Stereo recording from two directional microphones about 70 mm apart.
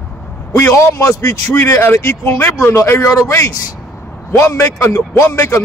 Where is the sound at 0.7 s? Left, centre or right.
Left.